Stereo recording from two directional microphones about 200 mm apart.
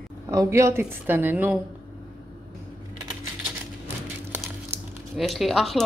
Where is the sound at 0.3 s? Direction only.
15° right (ahead or behind).